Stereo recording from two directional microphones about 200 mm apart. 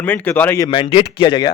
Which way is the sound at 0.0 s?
10° left (ahead or behind).